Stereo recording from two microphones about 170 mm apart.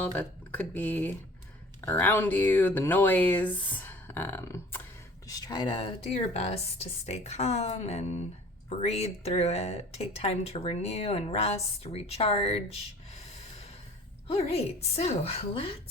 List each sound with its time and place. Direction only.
0.0 s speech: 10° left (ahead or behind); by 12.6 s 35° left (ahead or behind)
14.3 s speech: 35° left (ahead or behind)